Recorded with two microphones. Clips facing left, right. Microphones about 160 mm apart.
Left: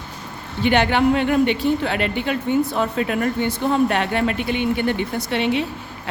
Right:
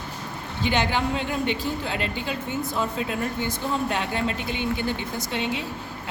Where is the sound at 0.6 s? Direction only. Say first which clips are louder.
Left 7 dB; 65° left (ahead or behind).